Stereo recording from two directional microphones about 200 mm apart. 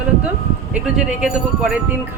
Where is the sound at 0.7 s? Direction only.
5° right (ahead or behind).